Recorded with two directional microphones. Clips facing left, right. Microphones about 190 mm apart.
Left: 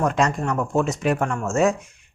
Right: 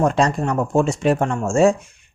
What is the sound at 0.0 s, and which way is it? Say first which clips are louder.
Speech: right 3 dB; 30° right (ahead or behind).